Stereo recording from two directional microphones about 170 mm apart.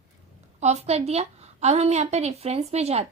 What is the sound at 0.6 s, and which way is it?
A woman's voice, 40° right (ahead or behind).